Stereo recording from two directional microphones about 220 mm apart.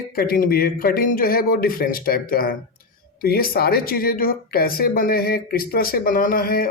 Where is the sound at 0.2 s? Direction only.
40° left (ahead or behind).